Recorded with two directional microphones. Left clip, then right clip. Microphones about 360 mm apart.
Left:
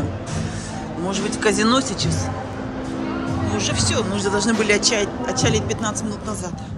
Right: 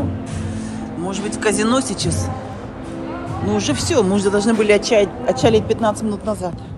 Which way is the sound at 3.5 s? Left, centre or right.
Centre.